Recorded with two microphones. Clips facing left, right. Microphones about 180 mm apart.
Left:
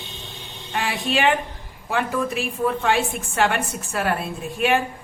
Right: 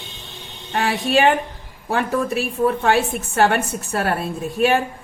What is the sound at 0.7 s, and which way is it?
A woman's voice, 35° right (ahead or behind).